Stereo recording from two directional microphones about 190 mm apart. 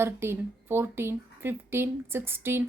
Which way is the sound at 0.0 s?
10° right (ahead or behind).